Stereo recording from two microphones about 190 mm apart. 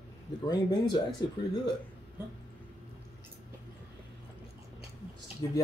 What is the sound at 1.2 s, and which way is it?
Speech, 20° left (ahead or behind).